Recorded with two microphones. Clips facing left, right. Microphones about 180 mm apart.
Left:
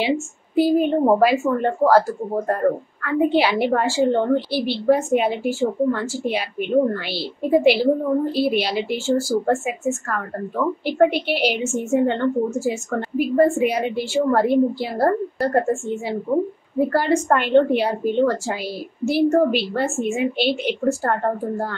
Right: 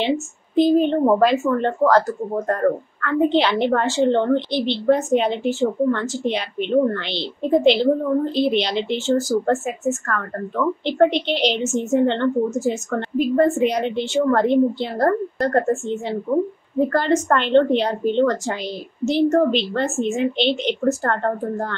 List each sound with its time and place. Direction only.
0.0 s speech: 10° left (ahead or behind)
10.9 s speech: 10° left (ahead or behind)
16.3 s speech: 30° left (ahead or behind)
16.7 s speech: 10° left (ahead or behind)